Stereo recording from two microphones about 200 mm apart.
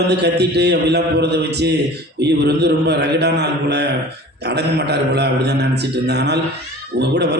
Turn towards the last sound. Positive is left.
turn(degrees=-60)  # may be behind; listen again after turning